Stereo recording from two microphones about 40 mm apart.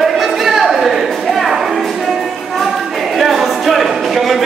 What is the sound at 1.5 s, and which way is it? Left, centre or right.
Music, centre.